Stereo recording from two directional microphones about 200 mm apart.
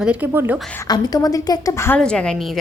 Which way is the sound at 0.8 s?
20° left (ahead or behind).